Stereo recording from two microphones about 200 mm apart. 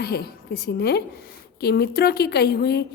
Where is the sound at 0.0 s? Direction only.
50° left (ahead or behind).